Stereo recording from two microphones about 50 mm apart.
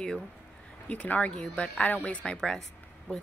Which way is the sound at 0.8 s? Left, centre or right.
Left.